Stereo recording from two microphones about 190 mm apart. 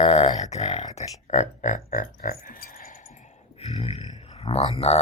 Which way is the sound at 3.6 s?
35° left (ahead or behind).